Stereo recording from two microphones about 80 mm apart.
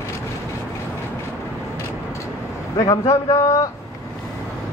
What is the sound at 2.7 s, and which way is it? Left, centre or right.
Speech, left.